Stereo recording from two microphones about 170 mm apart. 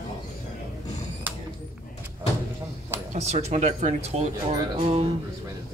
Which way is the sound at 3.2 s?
40° right (ahead or behind).